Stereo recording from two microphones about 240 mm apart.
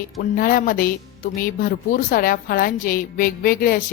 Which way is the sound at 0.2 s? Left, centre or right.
Left.